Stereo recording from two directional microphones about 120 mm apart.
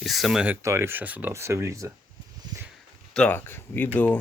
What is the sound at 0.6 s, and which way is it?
Speech, 25° right (ahead or behind).